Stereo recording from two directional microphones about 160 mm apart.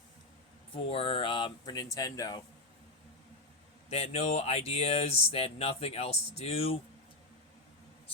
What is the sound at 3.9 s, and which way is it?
Speech, 40° left (ahead or behind).